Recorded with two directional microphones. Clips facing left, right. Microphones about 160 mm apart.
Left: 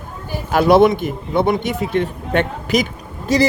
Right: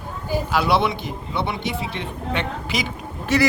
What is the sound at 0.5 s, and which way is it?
A man's voice, 45° left (ahead or behind).